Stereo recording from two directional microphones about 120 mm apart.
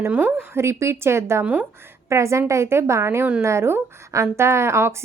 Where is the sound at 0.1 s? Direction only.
15° right (ahead or behind).